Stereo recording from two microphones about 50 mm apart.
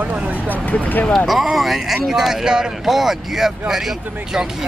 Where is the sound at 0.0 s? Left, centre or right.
Right.